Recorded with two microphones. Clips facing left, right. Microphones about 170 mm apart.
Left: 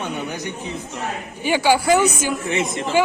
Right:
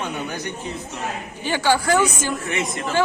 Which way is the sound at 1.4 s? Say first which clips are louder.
Left 3 dB; 10° left (ahead or behind).